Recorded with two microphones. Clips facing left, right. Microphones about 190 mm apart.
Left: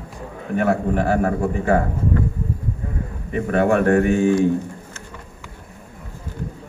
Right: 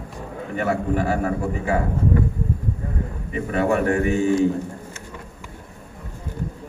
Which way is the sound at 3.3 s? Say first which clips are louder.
Left 3 dB; 55° left (ahead or behind).